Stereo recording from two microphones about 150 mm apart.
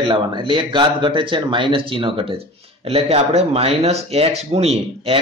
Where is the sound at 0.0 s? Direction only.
35° right (ahead or behind).